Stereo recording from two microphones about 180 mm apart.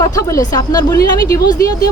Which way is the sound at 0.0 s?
15° left (ahead or behind).